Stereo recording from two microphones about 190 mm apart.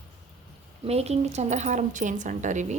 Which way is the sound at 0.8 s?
35° right (ahead or behind).